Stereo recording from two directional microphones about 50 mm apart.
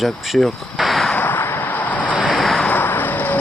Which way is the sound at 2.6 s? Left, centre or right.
Left.